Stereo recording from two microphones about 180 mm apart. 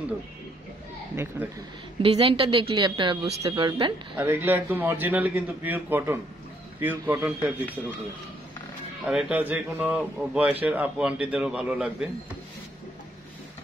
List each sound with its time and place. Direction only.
1.1 s a man's voice: 15° right (ahead or behind)
2.0 s a woman's voice: 30° right (ahead or behind)
4.2 s a man's voice: 10° right (ahead or behind)
9.0 s a man's voice: 5° right (ahead or behind)